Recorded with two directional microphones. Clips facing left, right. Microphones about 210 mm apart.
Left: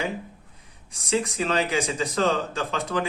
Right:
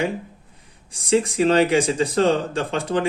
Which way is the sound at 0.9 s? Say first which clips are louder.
Right 6 dB; 30° right (ahead or behind).